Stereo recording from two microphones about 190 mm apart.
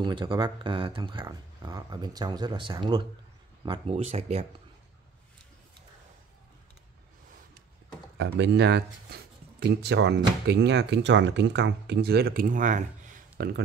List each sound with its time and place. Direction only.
0.0 s speech: 25° right (ahead or behind)
8.2 s speech: 65° right (ahead or behind); by 13.5 s 40° right (ahead or behind)